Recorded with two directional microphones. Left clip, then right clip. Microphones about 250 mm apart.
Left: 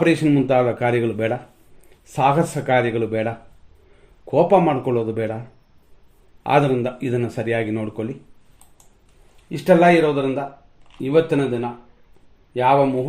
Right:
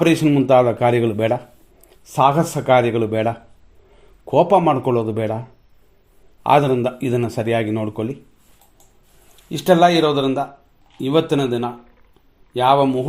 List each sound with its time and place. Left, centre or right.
0.0 s a man's voice: right
6.4 s a man's voice: right
9.5 s a man's voice: right